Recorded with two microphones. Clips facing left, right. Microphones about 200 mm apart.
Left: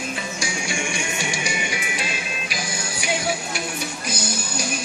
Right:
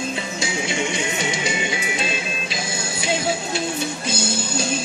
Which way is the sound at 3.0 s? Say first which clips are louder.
Right 2 dB; 25° right (ahead or behind).